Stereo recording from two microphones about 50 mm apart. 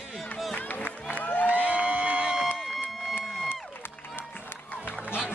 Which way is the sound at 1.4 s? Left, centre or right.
Right.